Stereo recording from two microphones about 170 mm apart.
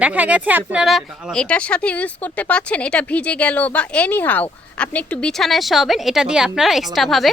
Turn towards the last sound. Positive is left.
turn(degrees=0)  # may be behind; listen again after turning